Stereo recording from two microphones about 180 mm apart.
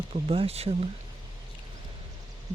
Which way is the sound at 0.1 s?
35° right (ahead or behind).